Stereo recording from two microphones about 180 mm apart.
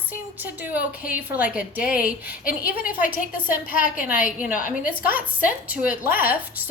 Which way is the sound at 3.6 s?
50° left (ahead or behind).